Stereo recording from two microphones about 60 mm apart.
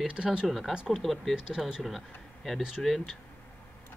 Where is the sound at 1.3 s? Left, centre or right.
Centre.